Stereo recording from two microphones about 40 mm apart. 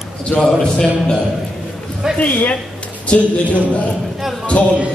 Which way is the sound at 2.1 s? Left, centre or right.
Left.